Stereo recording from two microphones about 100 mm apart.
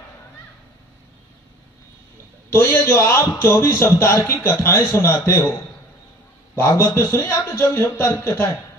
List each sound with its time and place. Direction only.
2.5 s a man's voice: 25° left (ahead or behind)
6.6 s a man's voice: 25° left (ahead or behind)